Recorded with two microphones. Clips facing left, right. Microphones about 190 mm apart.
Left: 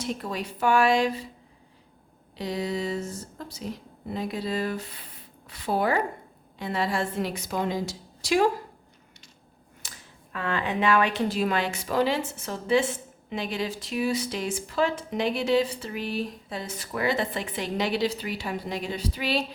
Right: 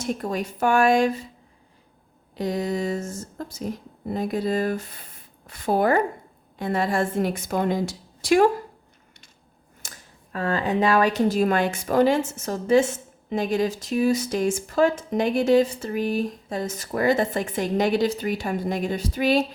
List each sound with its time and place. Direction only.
0.0 s a woman's voice: 45° right (ahead or behind)
2.3 s a woman's voice: 50° right (ahead or behind)
9.8 s finger snapping: 45° right (ahead or behind)
10.3 s a woman's voice: 40° right (ahead or behind)